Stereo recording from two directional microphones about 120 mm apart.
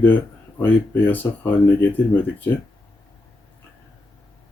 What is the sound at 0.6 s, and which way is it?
Speech, 15° left (ahead or behind).